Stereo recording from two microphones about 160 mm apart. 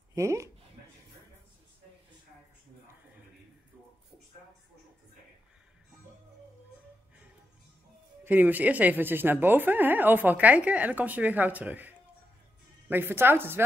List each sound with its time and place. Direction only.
0.1 s speech: 20° right (ahead or behind)
8.2 s speech: 10° right (ahead or behind)